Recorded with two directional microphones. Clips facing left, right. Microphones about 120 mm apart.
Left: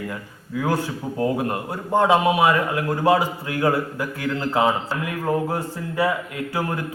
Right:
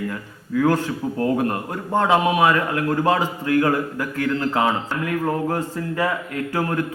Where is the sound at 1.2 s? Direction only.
15° left (ahead or behind).